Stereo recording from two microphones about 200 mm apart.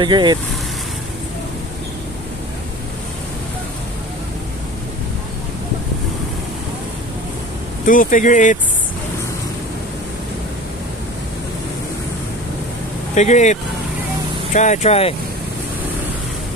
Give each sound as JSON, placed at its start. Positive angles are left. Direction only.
{"t": 0.0, "sound": "speech", "side_deg": -20}
{"t": 7.8, "sound": "speech", "side_deg": 40}
{"t": 13.1, "sound": "speech", "side_deg": 35}